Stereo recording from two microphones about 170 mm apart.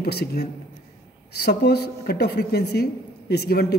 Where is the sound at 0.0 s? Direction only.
65° left (ahead or behind).